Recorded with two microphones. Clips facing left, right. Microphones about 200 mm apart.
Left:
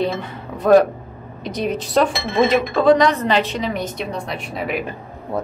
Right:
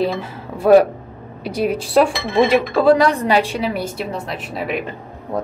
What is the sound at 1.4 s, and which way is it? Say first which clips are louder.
A woman's voice: right 3 dB; 10° right (ahead or behind).